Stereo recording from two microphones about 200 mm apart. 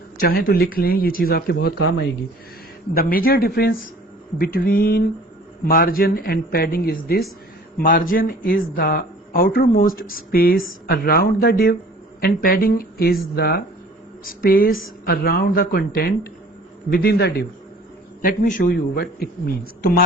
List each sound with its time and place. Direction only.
0.2 s speech: 50° left (ahead or behind)
2.9 s speech: 45° left (ahead or behind)
18.2 s speech: 45° left (ahead or behind)